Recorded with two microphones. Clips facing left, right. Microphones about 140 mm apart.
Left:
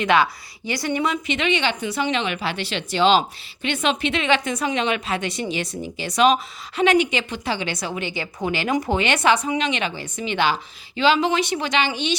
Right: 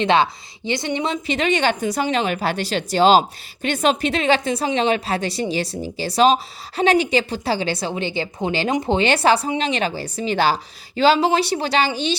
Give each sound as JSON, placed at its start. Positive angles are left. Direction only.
{"t": 0.0, "sound": "a woman's voice", "side_deg": -30}